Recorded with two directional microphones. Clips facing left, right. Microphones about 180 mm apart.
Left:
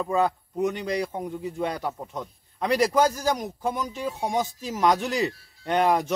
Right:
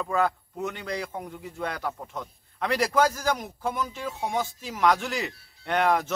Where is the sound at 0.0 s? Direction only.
20° left (ahead or behind).